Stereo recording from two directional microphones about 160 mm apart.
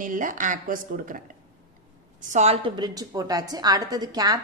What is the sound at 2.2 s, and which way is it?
A woman's voice, 45° right (ahead or behind).